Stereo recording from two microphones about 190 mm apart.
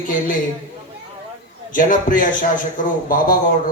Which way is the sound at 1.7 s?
45° left (ahead or behind).